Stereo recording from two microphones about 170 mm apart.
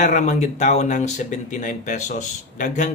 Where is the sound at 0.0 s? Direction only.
45° left (ahead or behind).